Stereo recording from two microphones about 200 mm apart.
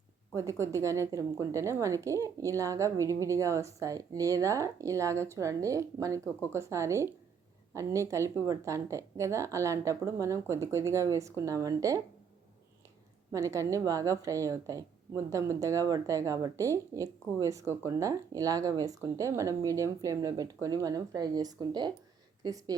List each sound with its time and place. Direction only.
0.3 s a woman's voice: 15° right (ahead or behind)
13.3 s a woman's voice: 15° right (ahead or behind)